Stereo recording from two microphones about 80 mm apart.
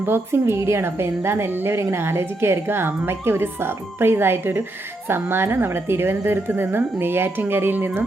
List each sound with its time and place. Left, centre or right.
0.0 s a woman's voice: right